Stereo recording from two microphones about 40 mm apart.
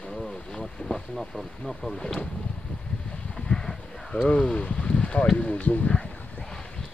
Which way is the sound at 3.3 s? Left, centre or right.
Centre.